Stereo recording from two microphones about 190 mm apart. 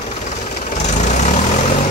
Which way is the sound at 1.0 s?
40° left (ahead or behind).